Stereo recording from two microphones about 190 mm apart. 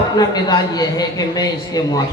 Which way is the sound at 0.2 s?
20° left (ahead or behind).